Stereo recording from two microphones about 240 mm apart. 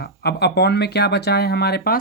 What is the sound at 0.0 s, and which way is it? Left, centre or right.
Speech, left.